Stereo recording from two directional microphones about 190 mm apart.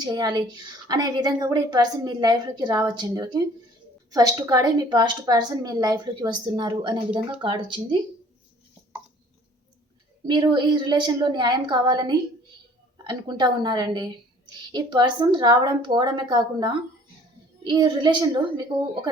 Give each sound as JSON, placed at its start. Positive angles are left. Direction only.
{"t": 0.0, "sound": "a woman's voice", "side_deg": -20}
{"t": 10.2, "sound": "a woman's voice", "side_deg": -25}